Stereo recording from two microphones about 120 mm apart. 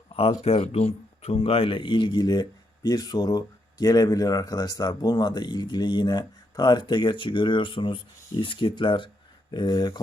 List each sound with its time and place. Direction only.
0.2 s speech: 60° left (ahead or behind); by 10.0 s 35° left (ahead or behind)